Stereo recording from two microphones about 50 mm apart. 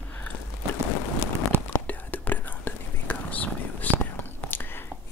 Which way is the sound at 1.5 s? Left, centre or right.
Right.